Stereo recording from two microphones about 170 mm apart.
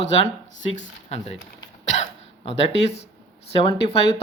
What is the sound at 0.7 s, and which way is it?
Speech, 40° left (ahead or behind).